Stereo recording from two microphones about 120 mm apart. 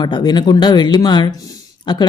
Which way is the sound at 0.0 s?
35° left (ahead or behind).